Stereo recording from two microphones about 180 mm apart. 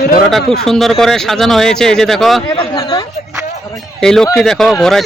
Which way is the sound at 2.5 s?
25° left (ahead or behind).